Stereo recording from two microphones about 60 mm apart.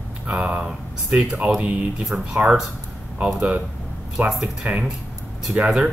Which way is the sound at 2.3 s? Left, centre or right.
Centre.